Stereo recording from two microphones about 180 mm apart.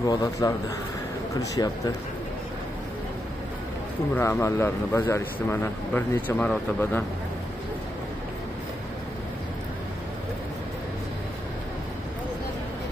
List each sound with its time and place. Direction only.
0.0 s a man's voice: 20° left (ahead or behind)
4.1 s a man's voice: 15° left (ahead or behind)